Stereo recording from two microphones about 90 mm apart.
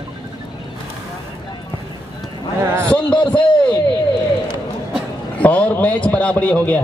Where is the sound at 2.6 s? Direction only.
25° right (ahead or behind).